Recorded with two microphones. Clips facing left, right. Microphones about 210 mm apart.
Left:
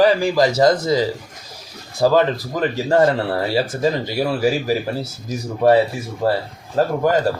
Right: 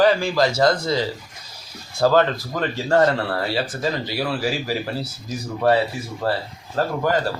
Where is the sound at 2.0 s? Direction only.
15° left (ahead or behind).